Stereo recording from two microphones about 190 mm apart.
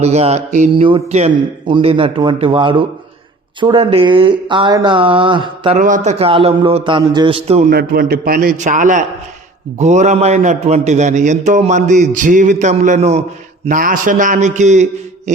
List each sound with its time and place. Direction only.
0.0 s a man's voice: 35° right (ahead or behind)
0.7 s a man's voice: 25° right (ahead or behind)
5.7 s a man's voice: 40° right (ahead or behind)
7.7 s a man's voice: 55° right (ahead or behind); by 13.2 s 35° right (ahead or behind)
13.7 s a man's voice: 45° right (ahead or behind)